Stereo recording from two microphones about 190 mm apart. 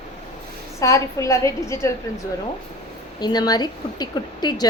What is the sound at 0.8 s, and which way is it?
A woman's voice, 15° left (ahead or behind).